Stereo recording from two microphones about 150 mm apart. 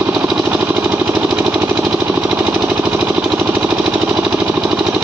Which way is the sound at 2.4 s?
20° right (ahead or behind).